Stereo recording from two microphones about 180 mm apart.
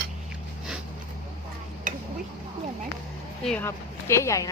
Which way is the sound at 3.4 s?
10° left (ahead or behind).